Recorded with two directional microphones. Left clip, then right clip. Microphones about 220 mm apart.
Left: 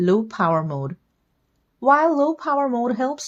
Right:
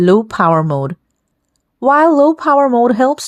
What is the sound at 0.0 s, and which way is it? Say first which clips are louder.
Speech: right 8 dB; 40° right (ahead or behind).